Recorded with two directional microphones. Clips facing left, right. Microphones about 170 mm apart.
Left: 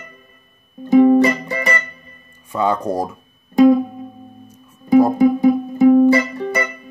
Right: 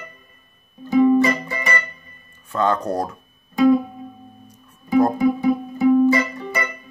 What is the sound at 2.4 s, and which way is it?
Speech, 10° left (ahead or behind).